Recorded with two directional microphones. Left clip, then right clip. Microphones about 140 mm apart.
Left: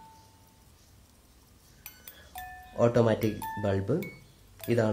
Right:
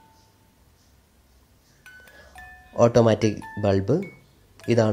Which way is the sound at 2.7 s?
35° right (ahead or behind).